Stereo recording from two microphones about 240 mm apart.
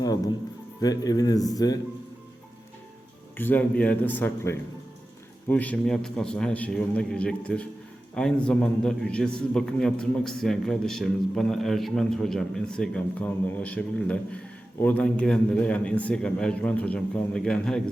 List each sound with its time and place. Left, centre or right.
0.8 s speech: centre
3.3 s a man's voice: centre